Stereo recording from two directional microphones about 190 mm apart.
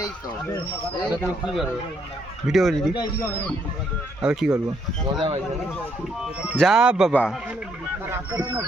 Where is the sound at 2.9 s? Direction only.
20° left (ahead or behind).